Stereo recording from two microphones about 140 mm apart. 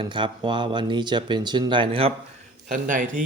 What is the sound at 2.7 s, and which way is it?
Speech, 70° right (ahead or behind).